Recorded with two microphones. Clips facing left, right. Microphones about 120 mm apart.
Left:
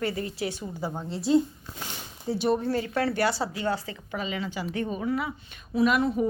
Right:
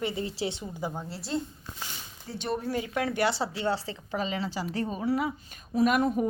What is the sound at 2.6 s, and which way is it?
A woman's voice, 10° right (ahead or behind).